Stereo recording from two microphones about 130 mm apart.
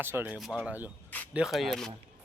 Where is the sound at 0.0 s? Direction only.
15° right (ahead or behind).